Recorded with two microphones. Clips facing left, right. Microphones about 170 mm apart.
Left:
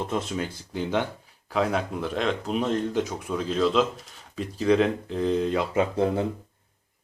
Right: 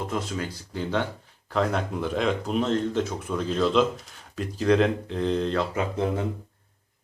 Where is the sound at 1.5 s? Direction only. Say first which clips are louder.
Even; 5° left (ahead or behind).